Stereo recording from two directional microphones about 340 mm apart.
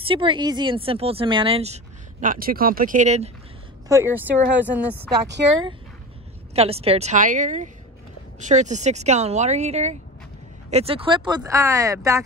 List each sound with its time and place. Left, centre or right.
0.0 s speech: centre
3.9 s speech: centre
6.5 s speech: centre